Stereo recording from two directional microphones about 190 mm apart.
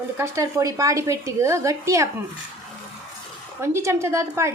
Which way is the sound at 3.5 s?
15° right (ahead or behind).